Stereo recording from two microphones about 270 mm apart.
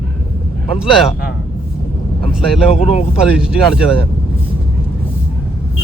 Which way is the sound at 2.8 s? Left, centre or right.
Left.